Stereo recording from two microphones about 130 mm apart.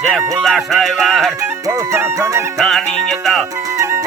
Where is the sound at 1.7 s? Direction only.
20° right (ahead or behind).